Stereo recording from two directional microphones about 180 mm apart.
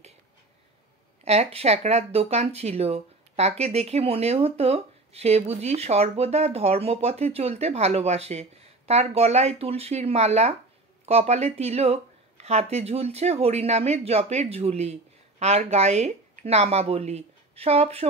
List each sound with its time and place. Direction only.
1.2 s speech: 35° right (ahead or behind)